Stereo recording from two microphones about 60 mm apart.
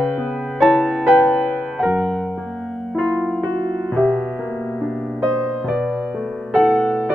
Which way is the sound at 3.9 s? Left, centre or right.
Centre.